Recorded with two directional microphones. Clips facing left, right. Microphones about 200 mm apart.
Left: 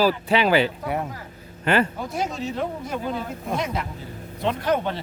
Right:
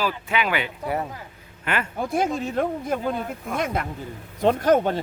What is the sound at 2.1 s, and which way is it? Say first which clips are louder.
Speech: right 4 dB; 55° right (ahead or behind).